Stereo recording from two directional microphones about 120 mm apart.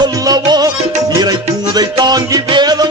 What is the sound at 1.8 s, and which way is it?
Music, 35° right (ahead or behind).